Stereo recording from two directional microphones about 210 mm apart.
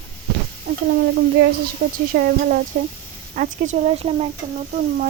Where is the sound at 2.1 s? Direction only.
45° right (ahead or behind).